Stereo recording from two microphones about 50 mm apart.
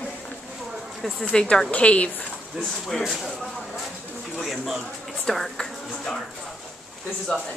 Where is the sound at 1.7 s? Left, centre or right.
Left.